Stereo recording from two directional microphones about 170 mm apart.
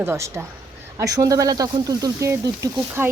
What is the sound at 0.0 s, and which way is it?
Speech, 15° right (ahead or behind).